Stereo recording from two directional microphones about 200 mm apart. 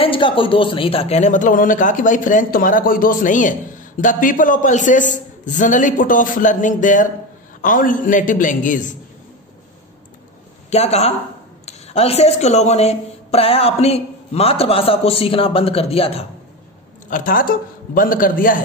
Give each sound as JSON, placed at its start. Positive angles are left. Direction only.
{"t": 0.0, "sound": "a man's voice", "side_deg": 25}
{"t": 10.7, "sound": "a man's voice", "side_deg": 30}
{"t": 17.1, "sound": "a man's voice", "side_deg": 45}